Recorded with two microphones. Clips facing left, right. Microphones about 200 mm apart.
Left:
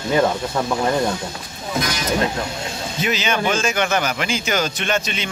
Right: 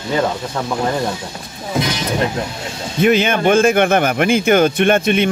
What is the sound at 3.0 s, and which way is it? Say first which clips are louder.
Speech: right 8 dB; 55° right (ahead or behind).